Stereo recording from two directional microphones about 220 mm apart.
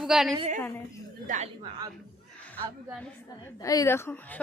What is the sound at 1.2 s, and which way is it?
Speech, 35° right (ahead or behind).